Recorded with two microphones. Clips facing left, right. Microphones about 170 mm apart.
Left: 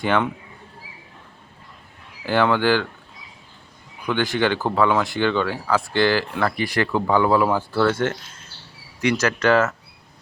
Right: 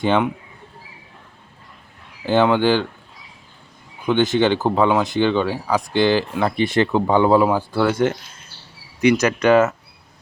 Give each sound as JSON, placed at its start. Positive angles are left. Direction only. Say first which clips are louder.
{"t": 0.0, "sound": "speech", "louder": "right 3 dB", "side_deg": -20}
{"t": 2.2, "sound": "speech", "louder": "right 3 dB", "side_deg": -20}
{"t": 4.0, "sound": "speech", "louder": "right 5 dB", "side_deg": -20}
{"t": 9.2, "sound": "speech", "louder": "right 1 dB", "side_deg": -15}